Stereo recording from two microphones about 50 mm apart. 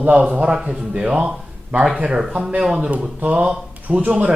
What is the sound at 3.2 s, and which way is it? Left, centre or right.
Speech, right.